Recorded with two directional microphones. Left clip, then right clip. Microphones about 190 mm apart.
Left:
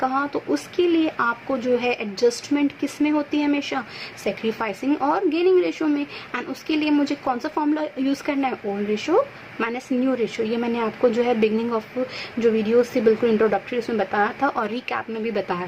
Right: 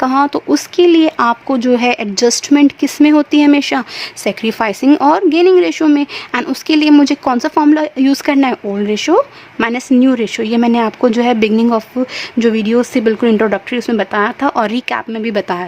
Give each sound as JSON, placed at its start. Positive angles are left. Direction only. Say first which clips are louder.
{"t": 0.0, "sound": "speech", "louder": "right 10 dB", "side_deg": -60}